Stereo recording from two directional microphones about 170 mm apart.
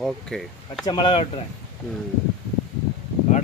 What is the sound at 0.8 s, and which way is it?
Speech, 30° left (ahead or behind).